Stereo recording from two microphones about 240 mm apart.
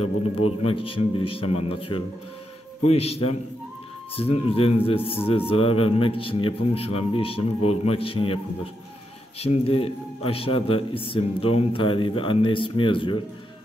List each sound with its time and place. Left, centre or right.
0.7 s a man's voice: left
9.4 s a man's voice: left